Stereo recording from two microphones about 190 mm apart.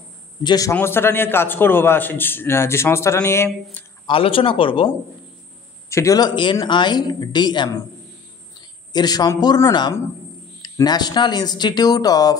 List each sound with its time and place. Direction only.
0.4 s a man's voice: 20° left (ahead or behind)
4.1 s speech: 30° left (ahead or behind)
5.9 s a man's voice: 15° left (ahead or behind)